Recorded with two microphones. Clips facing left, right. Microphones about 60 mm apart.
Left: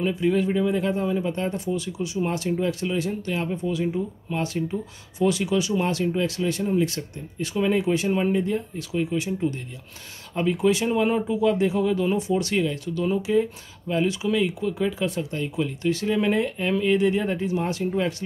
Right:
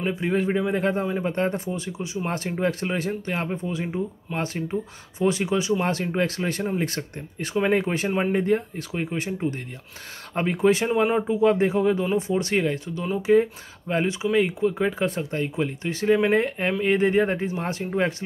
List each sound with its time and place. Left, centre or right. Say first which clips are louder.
0.0 s speech: left 2 dB; right